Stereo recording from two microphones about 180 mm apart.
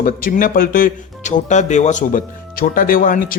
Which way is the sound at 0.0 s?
50° left (ahead or behind).